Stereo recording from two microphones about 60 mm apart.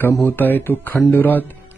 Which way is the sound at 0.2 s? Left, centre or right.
Left.